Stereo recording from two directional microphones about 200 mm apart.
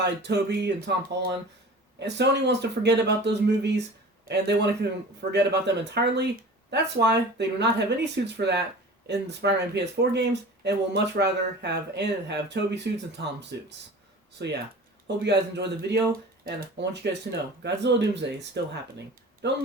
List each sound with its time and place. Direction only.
0.0 s speech: 60° right (ahead or behind)
2.0 s speech: 60° right (ahead or behind)